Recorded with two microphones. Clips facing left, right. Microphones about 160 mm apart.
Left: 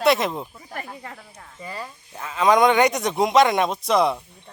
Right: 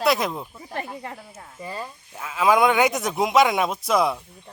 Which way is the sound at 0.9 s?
25° right (ahead or behind).